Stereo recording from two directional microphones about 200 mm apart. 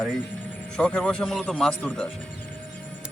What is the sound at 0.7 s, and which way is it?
Speech, 5° left (ahead or behind).